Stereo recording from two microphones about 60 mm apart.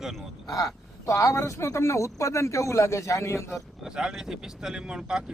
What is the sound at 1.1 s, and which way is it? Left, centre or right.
Speech, left.